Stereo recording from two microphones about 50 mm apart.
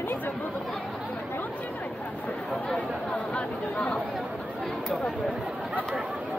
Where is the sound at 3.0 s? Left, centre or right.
Left.